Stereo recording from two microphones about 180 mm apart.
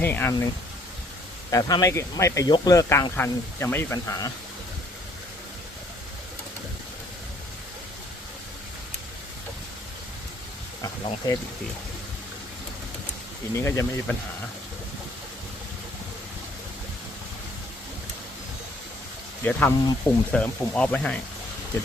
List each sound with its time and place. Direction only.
0.0 s speech: 10° left (ahead or behind)
1.5 s speech: 20° left (ahead or behind)
10.8 s speech: 20° left (ahead or behind)
13.5 s speech: 15° left (ahead or behind)
19.5 s speech: 10° left (ahead or behind)